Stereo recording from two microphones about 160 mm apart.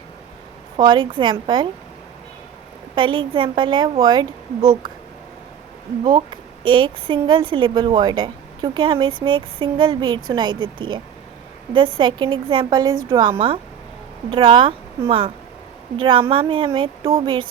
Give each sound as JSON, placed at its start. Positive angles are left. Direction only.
{"t": 0.8, "sound": "a woman's voice", "side_deg": -30}
{"t": 2.9, "sound": "a woman's voice", "side_deg": -30}
{"t": 6.1, "sound": "a woman's voice", "side_deg": -30}